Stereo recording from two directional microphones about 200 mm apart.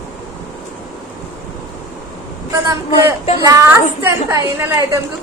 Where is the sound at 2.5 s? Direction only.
15° right (ahead or behind).